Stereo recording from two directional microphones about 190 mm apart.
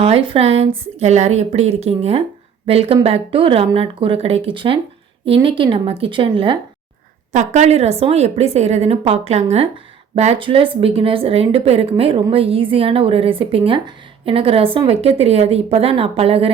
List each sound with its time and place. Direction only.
0.0 s a woman's voice: 30° right (ahead or behind)
7.3 s a woman's voice: 40° right (ahead or behind)